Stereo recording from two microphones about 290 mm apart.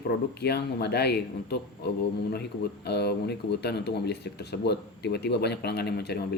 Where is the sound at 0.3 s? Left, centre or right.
Left.